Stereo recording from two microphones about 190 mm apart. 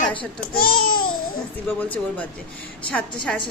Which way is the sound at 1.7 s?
10° left (ahead or behind).